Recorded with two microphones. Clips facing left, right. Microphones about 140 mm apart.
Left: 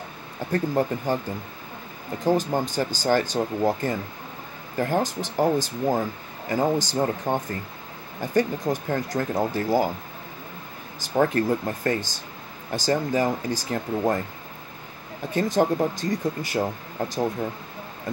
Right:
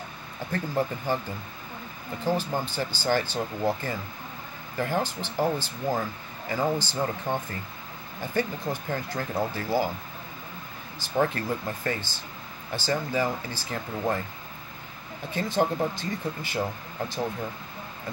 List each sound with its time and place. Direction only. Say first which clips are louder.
0.5 s speech: left 5 dB; 40° left (ahead or behind)
2.1 s speech: left 5 dB; 45° left (ahead or behind)
11.0 s speech: left 4 dB; 45° left (ahead or behind)
15.3 s speech: left 4 dB; 40° left (ahead or behind)